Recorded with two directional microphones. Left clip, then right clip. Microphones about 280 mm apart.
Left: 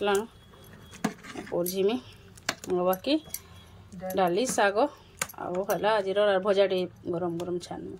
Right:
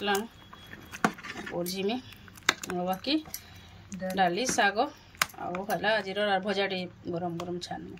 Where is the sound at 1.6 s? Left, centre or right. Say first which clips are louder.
Left 5 dB; centre.